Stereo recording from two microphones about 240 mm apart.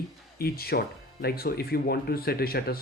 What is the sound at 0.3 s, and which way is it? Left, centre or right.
Speech, left.